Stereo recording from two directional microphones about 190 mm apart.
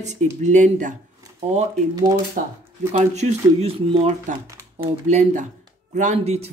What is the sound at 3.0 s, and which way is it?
Speech, 35° right (ahead or behind).